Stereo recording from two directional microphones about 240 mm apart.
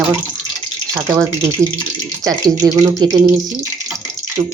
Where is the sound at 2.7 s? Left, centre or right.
Centre.